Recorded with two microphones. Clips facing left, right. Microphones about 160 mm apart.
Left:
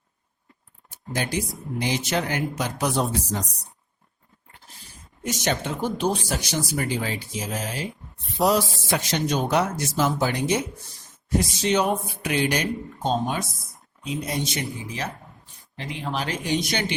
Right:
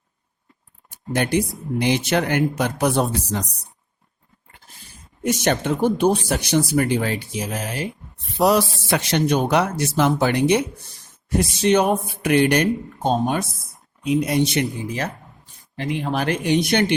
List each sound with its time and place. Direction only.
0.9 s speech: 60° right (ahead or behind)
5.2 s speech: 55° right (ahead or behind)
14.0 s speech: 65° right (ahead or behind)